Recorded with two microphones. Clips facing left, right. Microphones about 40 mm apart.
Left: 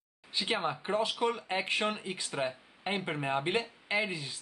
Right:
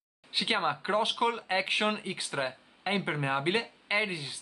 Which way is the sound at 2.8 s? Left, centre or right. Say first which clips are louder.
Right 3 dB; centre.